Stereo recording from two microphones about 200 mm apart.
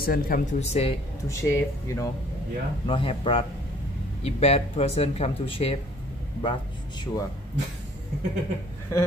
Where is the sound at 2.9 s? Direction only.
25° left (ahead or behind).